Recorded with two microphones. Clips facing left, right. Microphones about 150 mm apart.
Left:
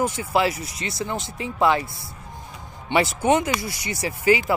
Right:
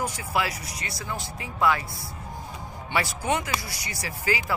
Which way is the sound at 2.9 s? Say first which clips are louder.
Left 7 dB; 20° left (ahead or behind).